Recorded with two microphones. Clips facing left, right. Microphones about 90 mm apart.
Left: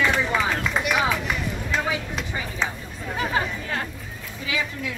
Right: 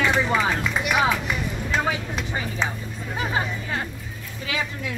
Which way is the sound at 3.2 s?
15° right (ahead or behind).